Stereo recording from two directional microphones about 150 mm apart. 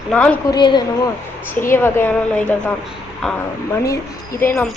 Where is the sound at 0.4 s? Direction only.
30° left (ahead or behind).